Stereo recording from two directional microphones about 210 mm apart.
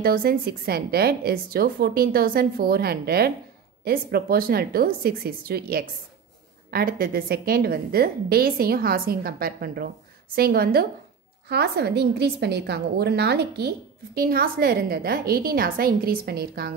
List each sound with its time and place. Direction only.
0.0 s a woman's voice: 45° right (ahead or behind)